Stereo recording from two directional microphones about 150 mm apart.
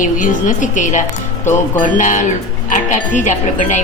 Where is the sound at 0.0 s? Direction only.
60° left (ahead or behind).